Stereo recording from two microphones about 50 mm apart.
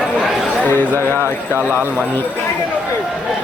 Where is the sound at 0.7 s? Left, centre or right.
Left.